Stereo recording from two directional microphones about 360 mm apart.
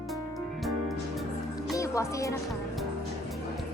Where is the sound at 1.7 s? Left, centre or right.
Centre.